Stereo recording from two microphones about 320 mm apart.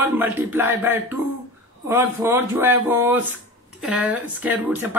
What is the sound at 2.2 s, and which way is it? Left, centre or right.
Speech, centre.